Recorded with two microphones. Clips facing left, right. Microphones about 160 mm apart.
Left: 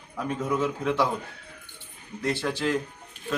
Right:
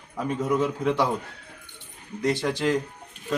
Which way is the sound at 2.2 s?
10° right (ahead or behind).